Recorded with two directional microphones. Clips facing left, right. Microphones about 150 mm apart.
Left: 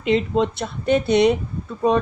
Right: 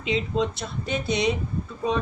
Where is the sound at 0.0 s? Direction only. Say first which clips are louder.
Left 6 dB; 55° left (ahead or behind).